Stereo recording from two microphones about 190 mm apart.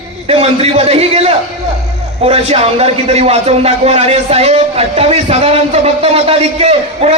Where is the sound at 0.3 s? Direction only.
30° right (ahead or behind).